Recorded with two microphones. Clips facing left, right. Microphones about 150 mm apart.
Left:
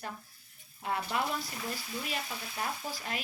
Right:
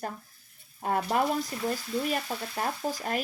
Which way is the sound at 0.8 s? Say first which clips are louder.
Right 7 dB; 45° right (ahead or behind).